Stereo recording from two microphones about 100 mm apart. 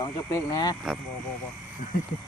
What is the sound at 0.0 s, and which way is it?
Speech, 35° left (ahead or behind).